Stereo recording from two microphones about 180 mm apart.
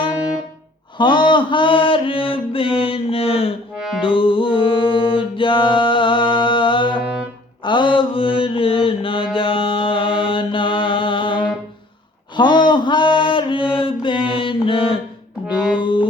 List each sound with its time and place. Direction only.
0.9 s mantra: 25° left (ahead or behind)
4.0 s music: 30° left (ahead or behind)
7.6 s mantra: 25° left (ahead or behind)
15.8 s music: 25° left (ahead or behind)